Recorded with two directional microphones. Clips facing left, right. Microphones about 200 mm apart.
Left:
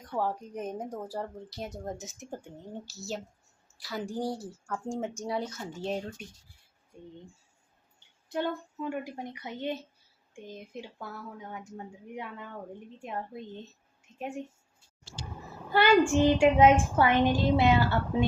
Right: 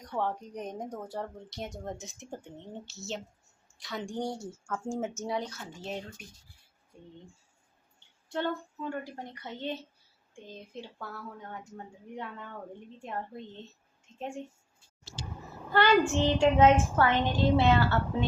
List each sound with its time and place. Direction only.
0.0 s speech: 5° left (ahead or behind)
2.8 s speech: 35° left (ahead or behind)
3.8 s speech: 5° left (ahead or behind)
7.9 s a woman's voice: 10° left (ahead or behind)
15.7 s a woman's voice: 10° left (ahead or behind)